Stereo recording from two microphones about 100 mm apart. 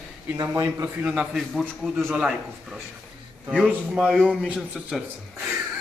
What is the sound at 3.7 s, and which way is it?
Speech, 10° right (ahead or behind).